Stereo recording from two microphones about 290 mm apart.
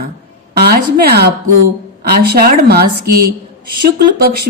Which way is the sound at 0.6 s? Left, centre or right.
Right.